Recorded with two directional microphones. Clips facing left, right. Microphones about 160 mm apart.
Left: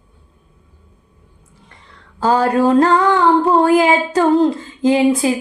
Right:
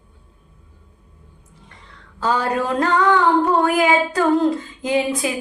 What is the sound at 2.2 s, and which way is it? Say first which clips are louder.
Music: left 7 dB; 35° left (ahead or behind).